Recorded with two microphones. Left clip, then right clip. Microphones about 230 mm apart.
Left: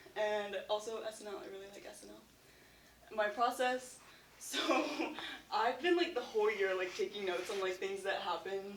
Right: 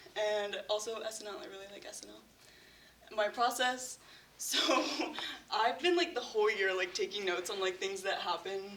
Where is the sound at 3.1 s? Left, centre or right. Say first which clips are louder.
Right 2 dB; right.